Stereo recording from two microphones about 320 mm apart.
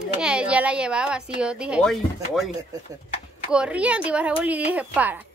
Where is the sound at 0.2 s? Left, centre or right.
Centre.